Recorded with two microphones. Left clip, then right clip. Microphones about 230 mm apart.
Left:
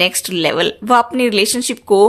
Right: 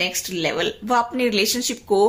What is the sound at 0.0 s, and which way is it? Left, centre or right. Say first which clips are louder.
A woman's voice: left 8 dB; left.